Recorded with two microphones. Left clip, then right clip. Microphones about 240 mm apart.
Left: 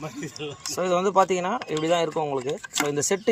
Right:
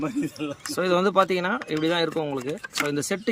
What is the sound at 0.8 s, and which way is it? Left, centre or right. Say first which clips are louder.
Speech: even; right.